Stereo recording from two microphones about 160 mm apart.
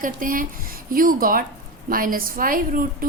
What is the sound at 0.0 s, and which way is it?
A woman's voice, 60° right (ahead or behind).